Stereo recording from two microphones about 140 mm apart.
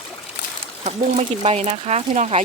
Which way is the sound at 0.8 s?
50° right (ahead or behind).